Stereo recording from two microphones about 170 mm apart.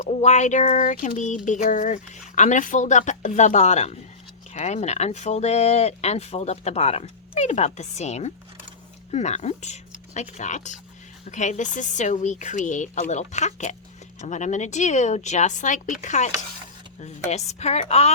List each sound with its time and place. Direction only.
0.0 s speech: 40° left (ahead or behind)